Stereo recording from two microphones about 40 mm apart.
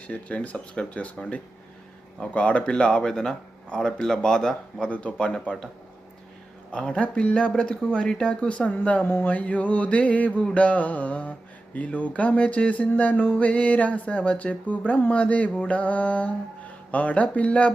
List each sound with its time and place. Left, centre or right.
0.1 s mantra: left
0.5 s speech: left
4.9 s mantra: left
5.3 s speech: left
6.7 s speech: left
8.8 s mantra: left